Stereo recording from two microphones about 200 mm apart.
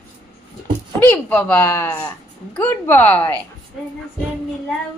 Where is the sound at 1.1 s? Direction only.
10° left (ahead or behind).